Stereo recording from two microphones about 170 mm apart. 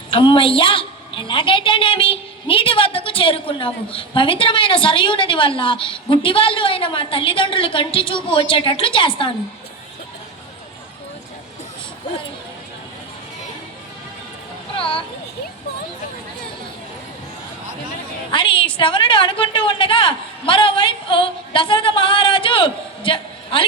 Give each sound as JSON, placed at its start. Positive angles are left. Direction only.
{"t": 0.1, "sound": "a woman's voice", "side_deg": 30}
{"t": 14.8, "sound": "a sound", "side_deg": 30}
{"t": 18.3, "sound": "a woman's voice", "side_deg": 30}